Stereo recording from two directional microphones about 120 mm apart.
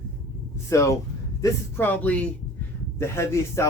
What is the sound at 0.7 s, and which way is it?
Speech, 25° left (ahead or behind).